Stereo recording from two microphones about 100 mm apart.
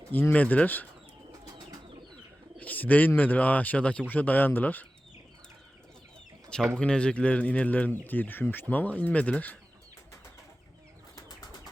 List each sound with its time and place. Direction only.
0.1 s speech: 20° left (ahead or behind)
2.6 s bird: 15° left (ahead or behind)
3.1 s speech: 15° left (ahead or behind)
6.7 s speech: 10° left (ahead or behind)
11.1 s bird flight: 35° left (ahead or behind)